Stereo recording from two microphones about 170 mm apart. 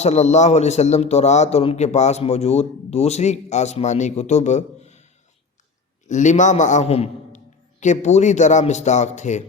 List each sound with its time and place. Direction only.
0.0 s a man's voice: 40° left (ahead or behind)
6.1 s a man's voice: 45° left (ahead or behind)